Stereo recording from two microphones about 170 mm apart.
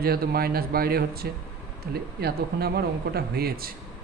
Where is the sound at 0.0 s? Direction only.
65° right (ahead or behind).